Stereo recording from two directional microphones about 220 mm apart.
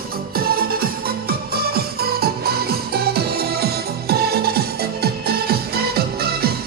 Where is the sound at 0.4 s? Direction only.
45° right (ahead or behind).